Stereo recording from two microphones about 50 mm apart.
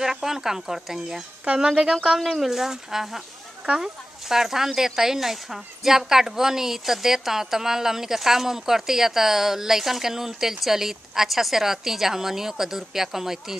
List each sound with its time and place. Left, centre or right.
0.0 s speech: centre
1.4 s speech: right
1.7 s speech: centre